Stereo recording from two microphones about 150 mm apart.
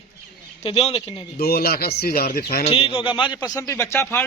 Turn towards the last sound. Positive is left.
turn(degrees=15)  # may be behind; listen again after turning